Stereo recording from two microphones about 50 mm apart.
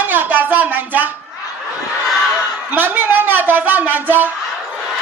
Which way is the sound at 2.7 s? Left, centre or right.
Right.